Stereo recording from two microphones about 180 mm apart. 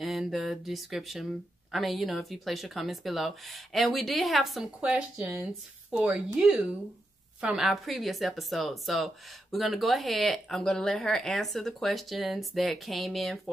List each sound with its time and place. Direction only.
0.0 s speech: centre (ahead or behind)